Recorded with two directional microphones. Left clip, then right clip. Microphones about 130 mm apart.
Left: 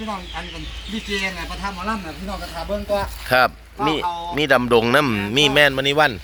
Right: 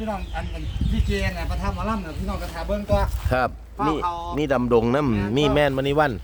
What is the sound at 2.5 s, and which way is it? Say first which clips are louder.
Speech: left 1 dB; 45° right (ahead or behind).